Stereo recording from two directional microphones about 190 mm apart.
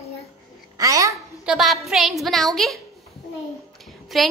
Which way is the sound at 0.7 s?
15° right (ahead or behind).